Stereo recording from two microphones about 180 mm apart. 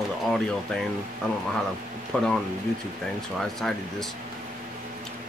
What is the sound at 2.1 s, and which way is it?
Speech, 5° left (ahead or behind).